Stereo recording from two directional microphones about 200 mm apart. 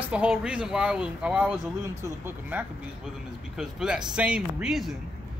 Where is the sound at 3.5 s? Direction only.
5° right (ahead or behind).